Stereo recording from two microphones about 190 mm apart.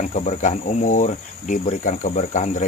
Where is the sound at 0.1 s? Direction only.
40° left (ahead or behind).